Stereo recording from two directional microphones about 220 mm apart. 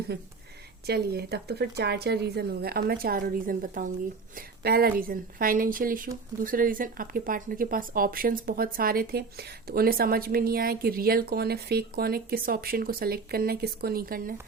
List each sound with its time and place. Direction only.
0.1 s speech: 50° right (ahead or behind)